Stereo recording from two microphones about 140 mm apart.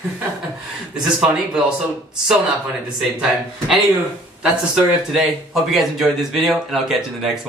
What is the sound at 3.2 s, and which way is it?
Speech, centre (ahead or behind).